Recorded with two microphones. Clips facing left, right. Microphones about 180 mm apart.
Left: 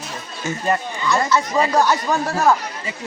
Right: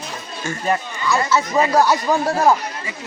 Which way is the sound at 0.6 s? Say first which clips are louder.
Even; 5° right (ahead or behind).